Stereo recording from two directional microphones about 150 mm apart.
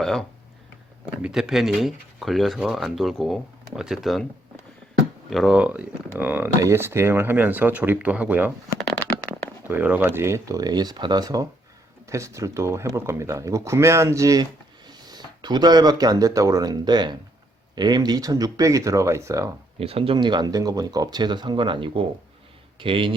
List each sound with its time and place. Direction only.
0.0 s speech: 5° left (ahead or behind)
5.3 s speech: centre (ahead or behind)
9.6 s speech: 15° right (ahead or behind)
19.8 s a man's voice: 40° right (ahead or behind)